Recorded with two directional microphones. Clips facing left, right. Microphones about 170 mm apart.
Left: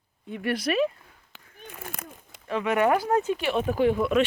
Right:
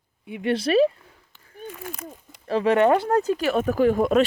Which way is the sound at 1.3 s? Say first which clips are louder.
Left 4 dB; 90° left.